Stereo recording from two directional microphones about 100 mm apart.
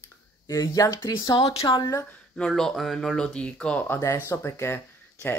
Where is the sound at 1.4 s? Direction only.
80° left.